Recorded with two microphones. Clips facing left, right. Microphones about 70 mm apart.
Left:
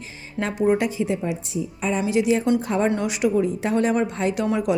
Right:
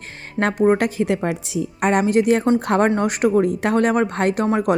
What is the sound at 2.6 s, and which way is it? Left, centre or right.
Speech, right.